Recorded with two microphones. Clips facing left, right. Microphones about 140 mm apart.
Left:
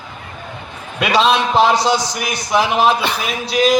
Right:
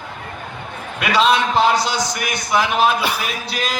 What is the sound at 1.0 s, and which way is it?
A man's voice, 25° left (ahead or behind).